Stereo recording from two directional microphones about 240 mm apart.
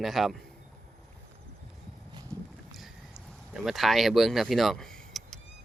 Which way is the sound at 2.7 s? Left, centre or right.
Centre.